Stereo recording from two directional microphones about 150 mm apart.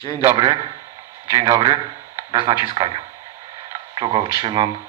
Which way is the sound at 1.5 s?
30° right (ahead or behind).